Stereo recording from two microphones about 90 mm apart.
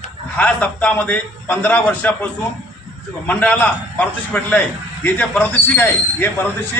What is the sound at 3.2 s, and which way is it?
A man's voice, 15° left (ahead or behind).